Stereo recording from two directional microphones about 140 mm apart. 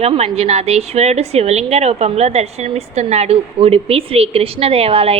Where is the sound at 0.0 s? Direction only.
45° right (ahead or behind).